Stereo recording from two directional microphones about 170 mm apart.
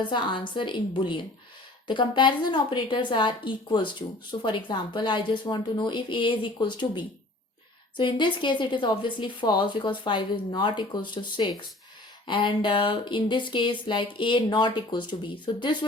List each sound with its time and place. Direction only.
0.0 s a woman's voice: 30° left (ahead or behind)